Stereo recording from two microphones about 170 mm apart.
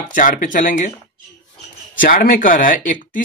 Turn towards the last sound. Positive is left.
turn(degrees=50)  # may be behind; listen again after turning